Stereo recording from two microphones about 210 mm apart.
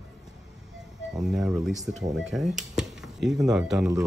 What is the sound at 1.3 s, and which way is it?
Speech, centre (ahead or behind).